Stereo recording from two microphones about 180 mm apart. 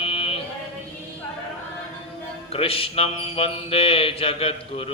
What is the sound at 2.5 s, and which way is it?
Mantra, 30° left (ahead or behind).